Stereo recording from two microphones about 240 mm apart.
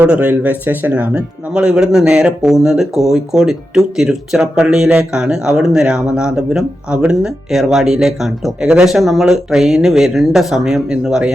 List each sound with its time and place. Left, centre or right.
0.0 s speech: centre